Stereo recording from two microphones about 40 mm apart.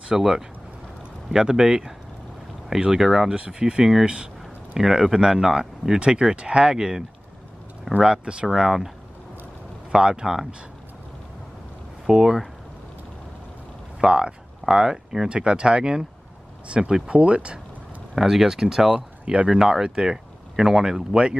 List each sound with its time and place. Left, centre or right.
0.1 s speech: centre
3.3 s speech: right
3.8 s speech: centre
5.9 s speech: right
8.1 s speech: right
8.5 s speech: centre
9.8 s speech: centre
12.1 s speech: centre
14.0 s speech: right
18.1 s speech: centre